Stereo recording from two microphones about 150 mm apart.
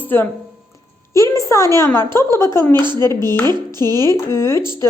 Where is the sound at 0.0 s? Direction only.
15° left (ahead or behind).